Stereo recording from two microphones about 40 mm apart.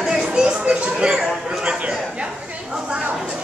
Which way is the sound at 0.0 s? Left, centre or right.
Centre.